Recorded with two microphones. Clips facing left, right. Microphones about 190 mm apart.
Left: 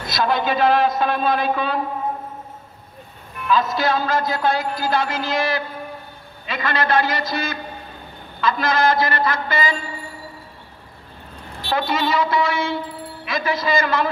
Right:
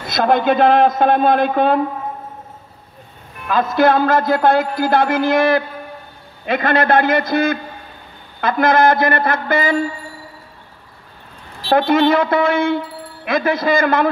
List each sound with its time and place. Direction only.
0.1 s a man's voice: 55° right (ahead or behind)
3.4 s a man's voice: 55° right (ahead or behind)
11.7 s a man's voice: 55° right (ahead or behind)